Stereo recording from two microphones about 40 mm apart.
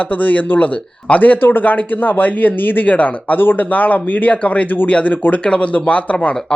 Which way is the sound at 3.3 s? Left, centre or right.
Left.